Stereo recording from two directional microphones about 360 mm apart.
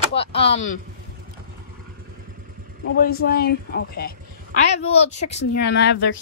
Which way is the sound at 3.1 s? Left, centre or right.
Left.